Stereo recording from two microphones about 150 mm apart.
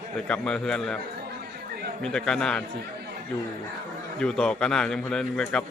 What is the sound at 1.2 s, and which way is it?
Chatter, 90° right.